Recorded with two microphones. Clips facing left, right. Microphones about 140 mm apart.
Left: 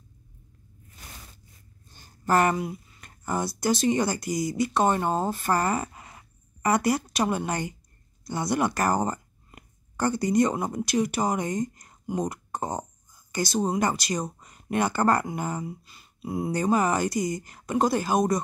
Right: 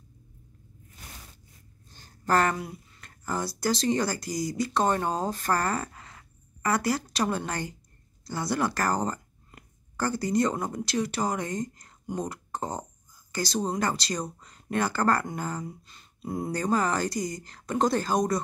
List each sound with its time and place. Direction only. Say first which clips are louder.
2.0 s speech: left 2 dB; 15° left (ahead or behind)